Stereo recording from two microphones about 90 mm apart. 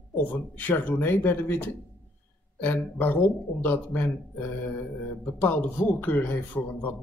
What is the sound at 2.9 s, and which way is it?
Speech, 20° left (ahead or behind).